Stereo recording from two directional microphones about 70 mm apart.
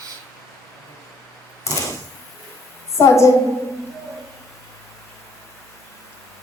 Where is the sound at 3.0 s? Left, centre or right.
Left.